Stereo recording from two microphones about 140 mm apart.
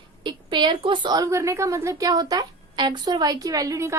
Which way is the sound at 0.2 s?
35° right (ahead or behind).